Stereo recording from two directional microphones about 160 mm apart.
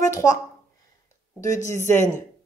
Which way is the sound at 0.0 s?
20° left (ahead or behind).